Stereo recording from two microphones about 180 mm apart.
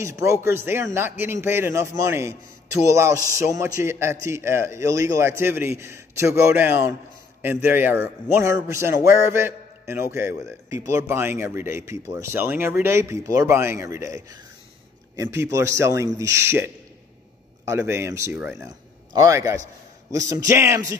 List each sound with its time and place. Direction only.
0.0 s speech: 15° right (ahead or behind)